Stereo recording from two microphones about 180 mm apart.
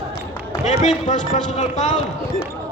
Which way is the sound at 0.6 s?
40° left (ahead or behind).